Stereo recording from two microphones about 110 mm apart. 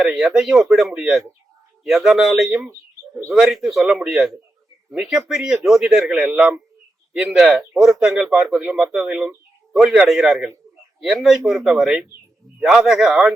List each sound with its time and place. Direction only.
0.0 s a man's voice: centre (ahead or behind)